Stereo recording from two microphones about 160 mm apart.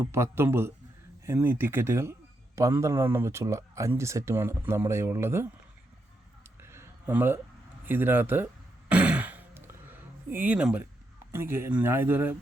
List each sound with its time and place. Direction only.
0.0 s speech: 15° right (ahead or behind)
6.6 s a sound: 15° right (ahead or behind)
7.9 s speech: 15° right (ahead or behind)
8.9 s throat clearing: 10° right (ahead or behind)
10.2 s speech: 10° right (ahead or behind)